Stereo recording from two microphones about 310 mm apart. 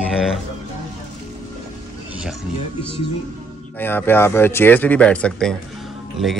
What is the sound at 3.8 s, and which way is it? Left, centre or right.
Speech, centre.